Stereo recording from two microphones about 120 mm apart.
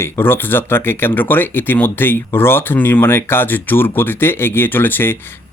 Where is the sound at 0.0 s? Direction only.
20° left (ahead or behind).